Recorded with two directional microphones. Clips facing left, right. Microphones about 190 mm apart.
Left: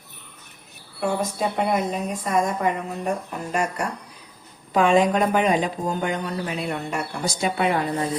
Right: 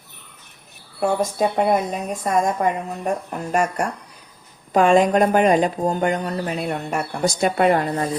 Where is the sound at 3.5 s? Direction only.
50° right (ahead or behind).